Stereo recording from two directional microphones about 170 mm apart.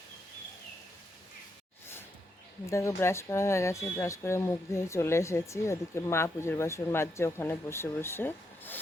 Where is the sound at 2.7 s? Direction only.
15° left (ahead or behind).